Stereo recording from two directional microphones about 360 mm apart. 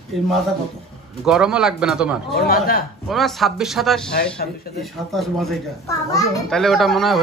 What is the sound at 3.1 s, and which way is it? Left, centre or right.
A child's voice, centre.